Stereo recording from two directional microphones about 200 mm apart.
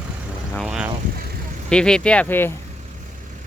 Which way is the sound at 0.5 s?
5° right (ahead or behind).